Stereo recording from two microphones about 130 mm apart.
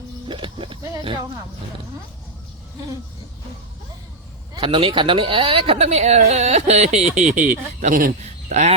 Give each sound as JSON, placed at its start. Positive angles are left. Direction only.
{"t": 0.3, "sound": "speech", "side_deg": -40}
{"t": 4.5, "sound": "speech", "side_deg": -40}